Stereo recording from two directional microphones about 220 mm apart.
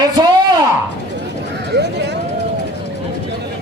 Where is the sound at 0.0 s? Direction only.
20° right (ahead or behind).